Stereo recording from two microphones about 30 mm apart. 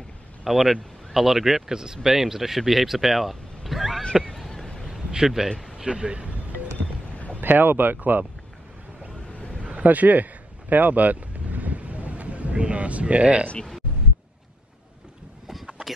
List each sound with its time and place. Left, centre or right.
0.4 s speech: centre
4.1 s a sound: centre
5.1 s speech: centre
5.9 s speech: right
7.3 s speech: right
9.6 s a sound: right
9.8 s vehicle: right
13.1 s speech: right